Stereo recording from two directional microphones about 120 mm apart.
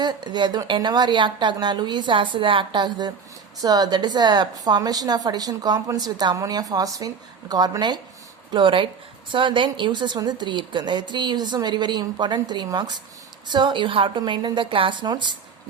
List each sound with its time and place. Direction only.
0.0 s a woman's voice: 35° right (ahead or behind)